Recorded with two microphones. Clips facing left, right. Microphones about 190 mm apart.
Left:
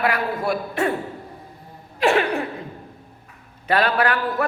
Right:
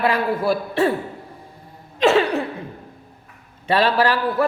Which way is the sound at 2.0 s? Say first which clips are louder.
Right 3 dB; 25° right (ahead or behind).